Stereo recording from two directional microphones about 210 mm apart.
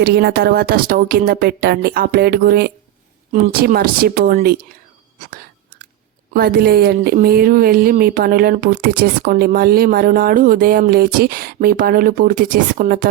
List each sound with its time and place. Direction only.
0.0 s speech: 50° right (ahead or behind)
6.3 s speech: 45° right (ahead or behind)